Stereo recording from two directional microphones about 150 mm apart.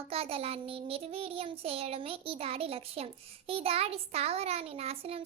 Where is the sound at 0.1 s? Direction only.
40° right (ahead or behind).